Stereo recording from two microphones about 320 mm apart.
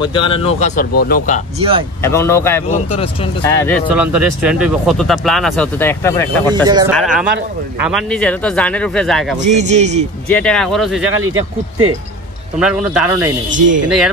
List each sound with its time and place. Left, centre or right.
0.0 s speech: centre
1.6 s speech: centre
2.0 s a man's voice: centre
6.5 s speech: centre
7.0 s speech: centre
9.4 s speech: right
10.2 s speech: centre
12.5 s speech: centre